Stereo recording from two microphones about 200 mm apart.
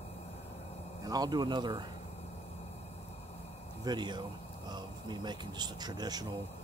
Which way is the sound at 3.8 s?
20° right (ahead or behind).